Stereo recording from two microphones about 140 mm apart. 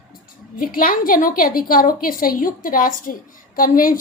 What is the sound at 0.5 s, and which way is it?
A woman's voice, 90° left.